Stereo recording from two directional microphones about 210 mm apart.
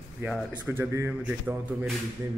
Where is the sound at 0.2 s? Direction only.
5° right (ahead or behind).